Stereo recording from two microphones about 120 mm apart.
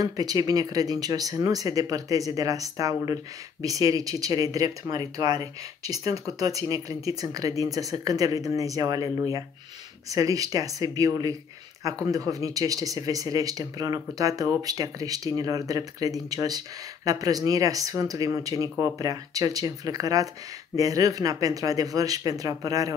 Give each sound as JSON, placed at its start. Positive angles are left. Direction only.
{"t": 0.0, "sound": "speech", "side_deg": -30}